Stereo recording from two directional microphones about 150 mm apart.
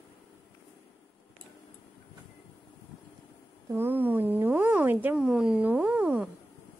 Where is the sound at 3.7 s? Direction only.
15° right (ahead or behind).